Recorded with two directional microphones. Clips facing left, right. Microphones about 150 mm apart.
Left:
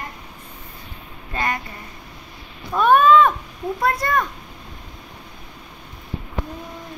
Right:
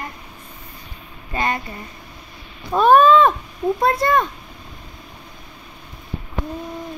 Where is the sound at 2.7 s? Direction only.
35° right (ahead or behind).